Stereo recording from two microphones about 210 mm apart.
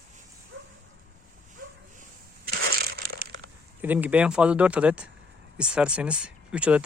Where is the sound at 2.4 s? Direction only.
45° right (ahead or behind).